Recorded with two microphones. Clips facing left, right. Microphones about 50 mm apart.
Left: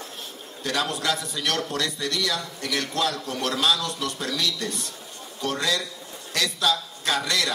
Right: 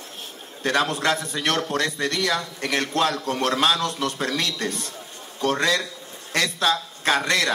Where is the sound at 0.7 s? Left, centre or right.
Right.